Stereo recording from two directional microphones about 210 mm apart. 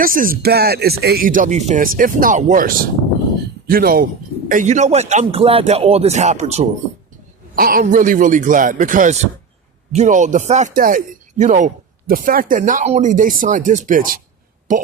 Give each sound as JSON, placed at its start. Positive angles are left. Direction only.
{"t": 0.0, "sound": "speech", "side_deg": -40}
{"t": 7.5, "sound": "speech", "side_deg": -40}